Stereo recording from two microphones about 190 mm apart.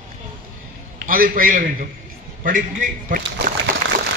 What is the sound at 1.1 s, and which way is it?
A man's voice, 50° right (ahead or behind).